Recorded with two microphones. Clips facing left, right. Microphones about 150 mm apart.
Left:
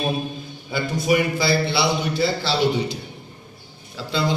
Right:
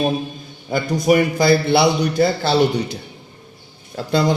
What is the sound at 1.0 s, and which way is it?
A man's voice, 50° right (ahead or behind).